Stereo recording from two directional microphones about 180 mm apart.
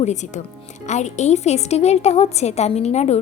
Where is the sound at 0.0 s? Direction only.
40° left (ahead or behind).